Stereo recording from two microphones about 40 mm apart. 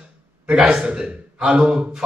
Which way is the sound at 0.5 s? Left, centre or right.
Right.